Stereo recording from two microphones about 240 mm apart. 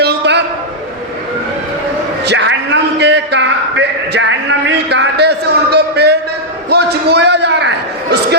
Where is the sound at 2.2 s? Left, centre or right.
Right.